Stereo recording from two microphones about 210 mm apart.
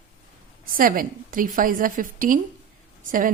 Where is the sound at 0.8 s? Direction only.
40° right (ahead or behind).